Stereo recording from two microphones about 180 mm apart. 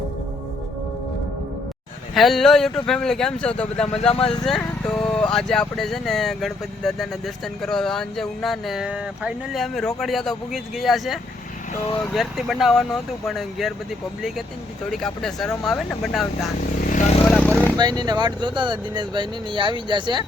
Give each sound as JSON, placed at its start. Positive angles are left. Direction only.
{"t": 2.1, "sound": "speech", "side_deg": 0}
{"t": 4.1, "sound": "speech", "side_deg": 30}
{"t": 4.4, "sound": "speech", "side_deg": 5}
{"t": 17.2, "sound": "a sound", "side_deg": 10}
{"t": 17.7, "sound": "speech", "side_deg": -25}